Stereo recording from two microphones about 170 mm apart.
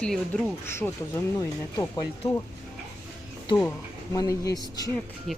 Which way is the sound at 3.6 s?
10° left (ahead or behind).